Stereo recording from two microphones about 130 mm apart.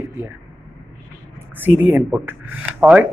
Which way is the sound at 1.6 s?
15° right (ahead or behind).